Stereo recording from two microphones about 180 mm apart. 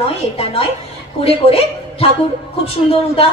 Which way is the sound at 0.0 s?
30° left (ahead or behind).